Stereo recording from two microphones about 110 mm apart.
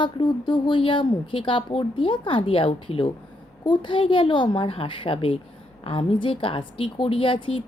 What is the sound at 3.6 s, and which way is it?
A woman's voice, 45° left (ahead or behind).